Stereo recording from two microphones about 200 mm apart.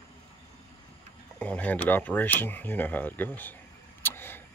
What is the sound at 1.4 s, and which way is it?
Speech, 5° left (ahead or behind).